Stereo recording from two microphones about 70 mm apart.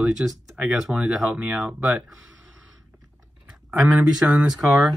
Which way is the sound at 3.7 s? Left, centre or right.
Centre.